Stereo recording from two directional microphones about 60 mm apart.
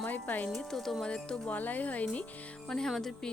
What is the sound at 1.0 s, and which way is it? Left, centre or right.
Music, centre.